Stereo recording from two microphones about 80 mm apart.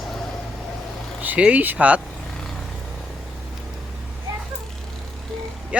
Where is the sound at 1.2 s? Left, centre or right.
Centre.